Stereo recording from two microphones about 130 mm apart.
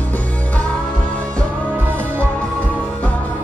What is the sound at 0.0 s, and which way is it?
Music, 10° left (ahead or behind).